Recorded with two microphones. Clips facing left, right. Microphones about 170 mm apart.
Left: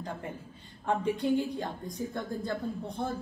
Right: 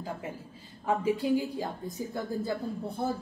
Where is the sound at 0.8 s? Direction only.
5° right (ahead or behind).